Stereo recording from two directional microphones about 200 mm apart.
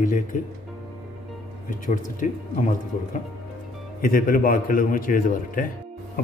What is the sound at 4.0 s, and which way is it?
A man's voice, 45° left (ahead or behind).